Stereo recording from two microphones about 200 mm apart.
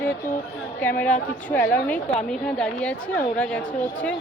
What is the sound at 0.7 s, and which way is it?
A woman's voice, 10° left (ahead or behind).